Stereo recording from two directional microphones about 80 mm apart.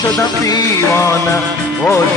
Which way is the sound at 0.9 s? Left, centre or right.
Left.